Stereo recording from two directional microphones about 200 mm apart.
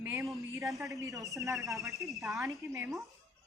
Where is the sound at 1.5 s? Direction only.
Centre (ahead or behind).